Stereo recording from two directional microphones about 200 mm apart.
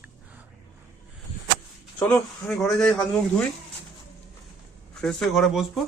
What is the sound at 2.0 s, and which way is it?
Speech, 5° left (ahead or behind).